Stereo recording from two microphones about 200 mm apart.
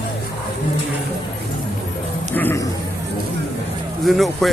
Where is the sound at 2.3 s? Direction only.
10° left (ahead or behind).